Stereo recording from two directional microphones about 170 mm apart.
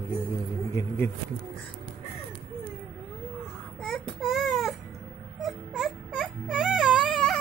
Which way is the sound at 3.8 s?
Centre (ahead or behind).